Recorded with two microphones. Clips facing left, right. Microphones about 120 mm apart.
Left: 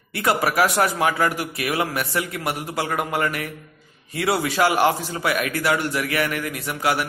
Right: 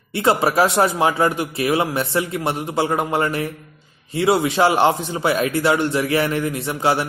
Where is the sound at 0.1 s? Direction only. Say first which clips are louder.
Right 4 dB; 25° right (ahead or behind).